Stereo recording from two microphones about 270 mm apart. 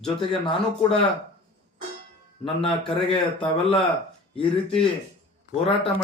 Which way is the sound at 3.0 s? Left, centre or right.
Centre.